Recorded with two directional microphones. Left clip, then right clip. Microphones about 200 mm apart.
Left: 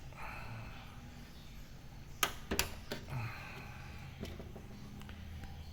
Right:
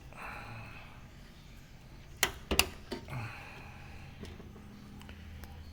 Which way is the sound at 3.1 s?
15° right (ahead or behind).